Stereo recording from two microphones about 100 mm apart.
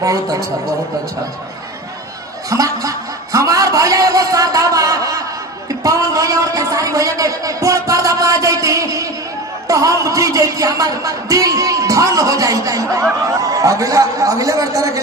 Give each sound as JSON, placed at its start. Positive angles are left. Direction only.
{"t": 0.0, "sound": "speech", "side_deg": -35}
{"t": 2.5, "sound": "speech", "side_deg": -35}
{"t": 3.3, "sound": "a sound", "side_deg": -35}
{"t": 9.6, "sound": "speech", "side_deg": -35}